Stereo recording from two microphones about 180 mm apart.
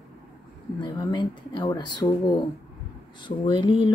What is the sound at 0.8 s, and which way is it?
Speech, 25° left (ahead or behind).